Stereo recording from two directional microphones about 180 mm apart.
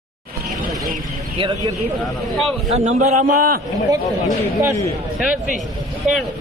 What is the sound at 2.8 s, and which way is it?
Speech, 40° right (ahead or behind).